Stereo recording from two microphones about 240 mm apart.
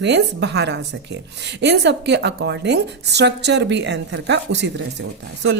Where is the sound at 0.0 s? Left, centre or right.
Right.